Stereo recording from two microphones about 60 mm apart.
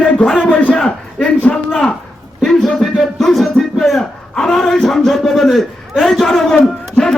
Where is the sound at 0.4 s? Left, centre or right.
Left; by 6.6 s centre.